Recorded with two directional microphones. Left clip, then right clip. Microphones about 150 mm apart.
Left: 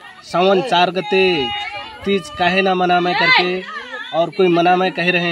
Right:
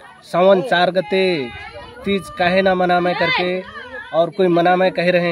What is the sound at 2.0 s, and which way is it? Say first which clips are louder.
Speech: left 1 dB; 45° right (ahead or behind).